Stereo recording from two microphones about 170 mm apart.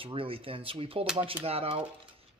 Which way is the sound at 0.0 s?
30° right (ahead or behind).